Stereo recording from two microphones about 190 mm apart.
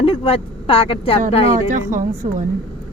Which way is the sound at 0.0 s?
30° left (ahead or behind).